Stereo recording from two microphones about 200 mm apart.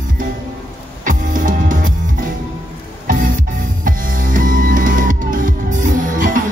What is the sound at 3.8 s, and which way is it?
Music, 40° right (ahead or behind).